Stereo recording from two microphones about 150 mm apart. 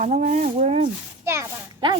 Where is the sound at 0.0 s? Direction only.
55° right (ahead or behind).